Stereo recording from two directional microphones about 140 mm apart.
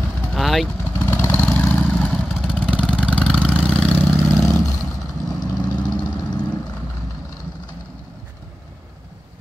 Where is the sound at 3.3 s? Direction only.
10° left (ahead or behind).